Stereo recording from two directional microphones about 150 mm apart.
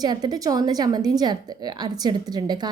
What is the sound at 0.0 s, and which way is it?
A woman's voice, 25° right (ahead or behind).